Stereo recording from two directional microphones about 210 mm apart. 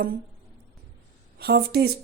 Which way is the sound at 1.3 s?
50° right (ahead or behind).